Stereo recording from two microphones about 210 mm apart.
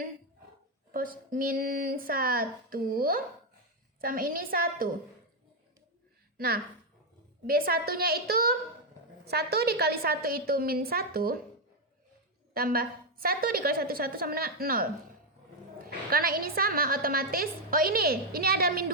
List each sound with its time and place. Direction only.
0.9 s a woman's voice: 40° right (ahead or behind)
6.3 s a woman's voice: 45° right (ahead or behind)
12.5 s a woman's voice: 45° right (ahead or behind)
15.9 s a woman's voice: 45° right (ahead or behind)